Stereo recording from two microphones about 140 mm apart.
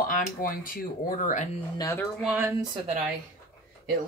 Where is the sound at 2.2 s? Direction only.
15° right (ahead or behind).